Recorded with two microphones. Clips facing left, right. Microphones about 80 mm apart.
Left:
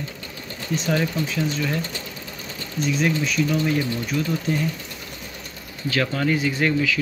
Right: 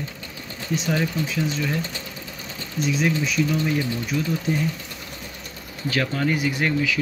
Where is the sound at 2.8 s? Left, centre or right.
Centre.